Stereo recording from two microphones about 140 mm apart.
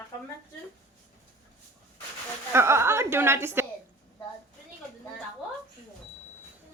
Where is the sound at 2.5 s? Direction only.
20° right (ahead or behind).